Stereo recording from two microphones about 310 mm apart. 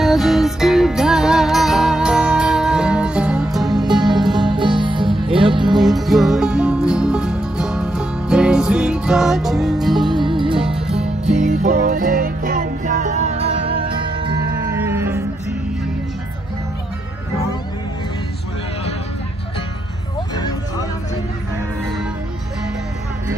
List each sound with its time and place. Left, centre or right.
0.0 s music: centre
4.4 s music: centre
5.7 s music: centre
10.1 s music: centre
10.6 s music: centre
11.4 s music: right; by 15.2 s centre